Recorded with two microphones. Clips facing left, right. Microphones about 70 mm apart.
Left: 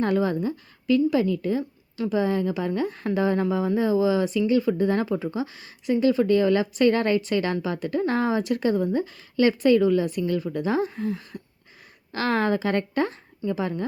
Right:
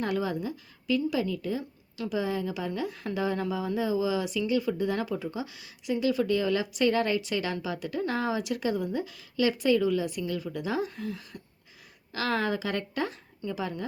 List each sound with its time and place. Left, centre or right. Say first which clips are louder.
0.0 s a woman's voice: left 6 dB; left